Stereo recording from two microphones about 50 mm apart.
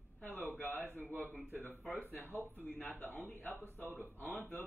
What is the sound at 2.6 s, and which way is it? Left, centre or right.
A woman's voice, left.